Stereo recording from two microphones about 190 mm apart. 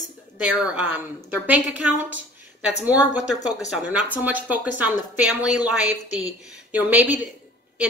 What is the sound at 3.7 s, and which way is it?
A woman's voice, 10° right (ahead or behind).